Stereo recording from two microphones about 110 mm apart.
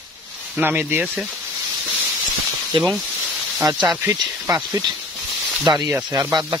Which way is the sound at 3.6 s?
35° right (ahead or behind).